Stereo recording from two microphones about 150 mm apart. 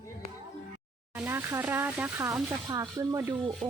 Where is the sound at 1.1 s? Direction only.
15° right (ahead or behind).